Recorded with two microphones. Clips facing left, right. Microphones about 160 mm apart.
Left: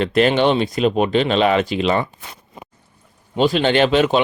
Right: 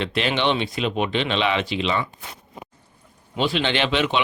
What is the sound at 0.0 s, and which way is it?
Speech, 45° left (ahead or behind).